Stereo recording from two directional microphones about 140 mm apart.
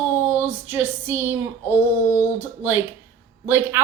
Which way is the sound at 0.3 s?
10° right (ahead or behind).